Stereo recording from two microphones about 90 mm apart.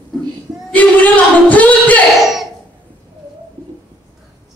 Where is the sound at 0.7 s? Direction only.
15° left (ahead or behind).